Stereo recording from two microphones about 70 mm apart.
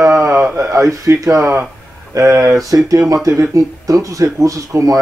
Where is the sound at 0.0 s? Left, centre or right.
Right.